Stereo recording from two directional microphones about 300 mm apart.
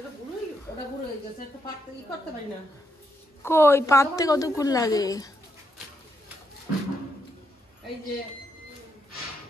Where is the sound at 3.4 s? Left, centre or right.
Centre.